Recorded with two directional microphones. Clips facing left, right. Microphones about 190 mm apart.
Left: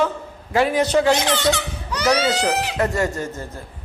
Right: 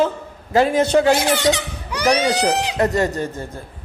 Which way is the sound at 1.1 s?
10° right (ahead or behind).